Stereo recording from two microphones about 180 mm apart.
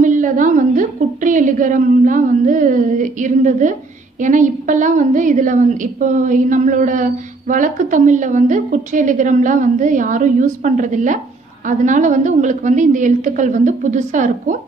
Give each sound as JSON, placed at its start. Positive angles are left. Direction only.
{"t": 0.0, "sound": "a woman's voice", "side_deg": -45}